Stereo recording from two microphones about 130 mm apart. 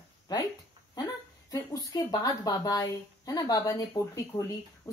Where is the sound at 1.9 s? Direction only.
30° left (ahead or behind).